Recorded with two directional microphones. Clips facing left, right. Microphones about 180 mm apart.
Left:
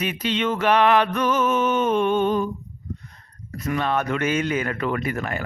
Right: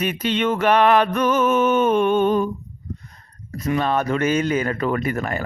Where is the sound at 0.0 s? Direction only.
50° right (ahead or behind).